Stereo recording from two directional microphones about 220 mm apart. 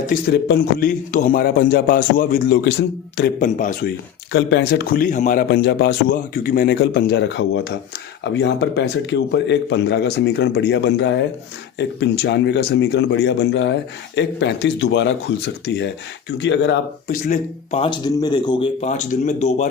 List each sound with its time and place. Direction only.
0.1 s a man's voice: 45° left (ahead or behind)
4.3 s speech: 55° left (ahead or behind)
17.1 s speech: 35° left (ahead or behind)